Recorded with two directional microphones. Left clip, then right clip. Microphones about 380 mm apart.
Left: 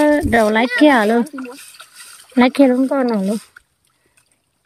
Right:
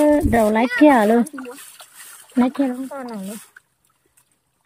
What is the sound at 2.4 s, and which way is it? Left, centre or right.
Speech, centre.